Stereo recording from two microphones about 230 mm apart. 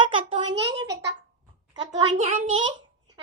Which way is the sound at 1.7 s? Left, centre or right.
Right.